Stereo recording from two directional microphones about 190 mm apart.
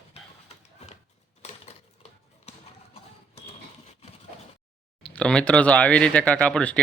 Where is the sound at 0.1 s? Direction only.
35° left (ahead or behind).